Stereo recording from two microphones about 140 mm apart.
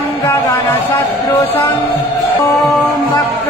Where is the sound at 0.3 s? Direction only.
20° left (ahead or behind).